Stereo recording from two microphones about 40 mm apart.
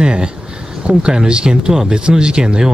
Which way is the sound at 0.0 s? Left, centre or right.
Right.